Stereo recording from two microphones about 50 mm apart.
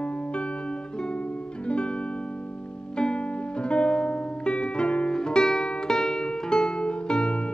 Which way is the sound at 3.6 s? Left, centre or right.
Left.